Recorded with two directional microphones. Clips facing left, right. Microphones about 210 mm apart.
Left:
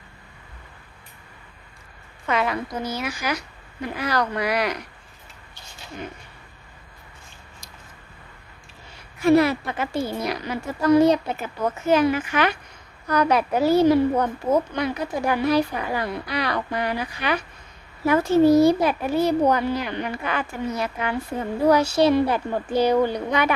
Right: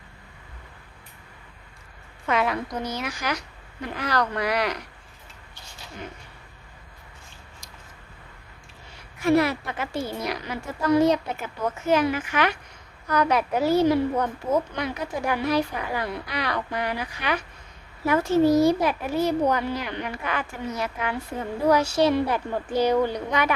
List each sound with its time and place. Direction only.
2.2 s a woman's voice: centre (ahead or behind)
9.2 s a woman's voice: 30° left (ahead or behind)